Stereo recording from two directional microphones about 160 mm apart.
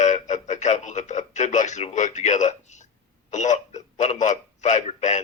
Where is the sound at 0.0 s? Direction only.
45° left (ahead or behind).